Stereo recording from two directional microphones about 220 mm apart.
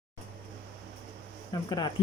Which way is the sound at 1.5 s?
20° left (ahead or behind).